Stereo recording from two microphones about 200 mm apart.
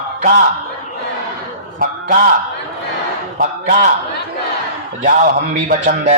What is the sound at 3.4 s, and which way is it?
Speech, 40° right (ahead or behind).